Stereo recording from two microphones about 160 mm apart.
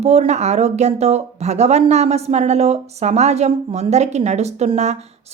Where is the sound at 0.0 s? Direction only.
40° right (ahead or behind).